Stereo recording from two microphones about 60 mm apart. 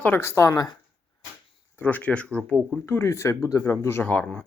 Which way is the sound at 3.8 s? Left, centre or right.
Left.